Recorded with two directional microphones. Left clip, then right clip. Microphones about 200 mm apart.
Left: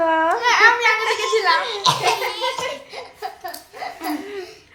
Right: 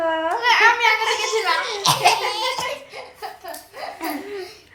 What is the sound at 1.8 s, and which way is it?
Speech, 35° right (ahead or behind).